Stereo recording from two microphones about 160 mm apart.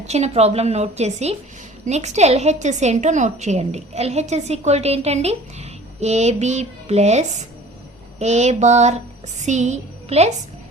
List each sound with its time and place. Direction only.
0.0 s a woman's voice: 45° right (ahead or behind)